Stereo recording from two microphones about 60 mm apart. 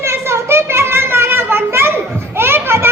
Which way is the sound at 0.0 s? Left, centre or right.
Right.